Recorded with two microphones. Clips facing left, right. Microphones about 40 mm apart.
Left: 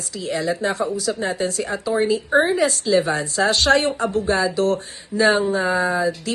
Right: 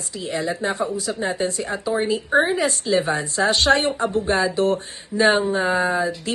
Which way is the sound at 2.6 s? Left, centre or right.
Right.